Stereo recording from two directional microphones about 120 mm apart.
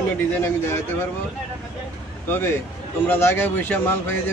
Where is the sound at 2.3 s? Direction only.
20° left (ahead or behind).